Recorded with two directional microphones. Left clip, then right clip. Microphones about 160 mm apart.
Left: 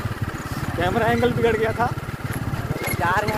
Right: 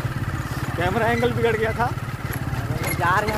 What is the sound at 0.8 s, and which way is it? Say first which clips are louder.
Speech: left 1 dB; 5° left (ahead or behind).